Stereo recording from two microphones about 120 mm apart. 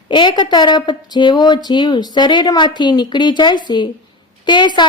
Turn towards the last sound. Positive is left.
turn(degrees=40)  # may be behind; listen again after turning